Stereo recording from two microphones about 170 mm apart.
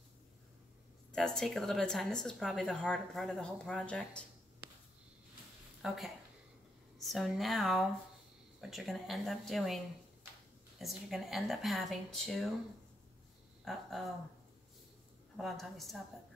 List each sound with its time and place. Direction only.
1.1 s speech: 5° left (ahead or behind)
5.8 s speech: centre (ahead or behind)
10.8 s speech: centre (ahead or behind)
13.7 s speech: centre (ahead or behind)
15.3 s speech: centre (ahead or behind)